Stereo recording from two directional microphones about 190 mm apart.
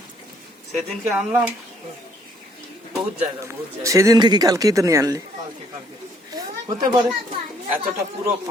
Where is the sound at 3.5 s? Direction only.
15° right (ahead or behind).